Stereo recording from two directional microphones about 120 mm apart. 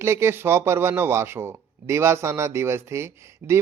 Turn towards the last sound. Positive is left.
turn(degrees=-20)  # may be behind; listen again after turning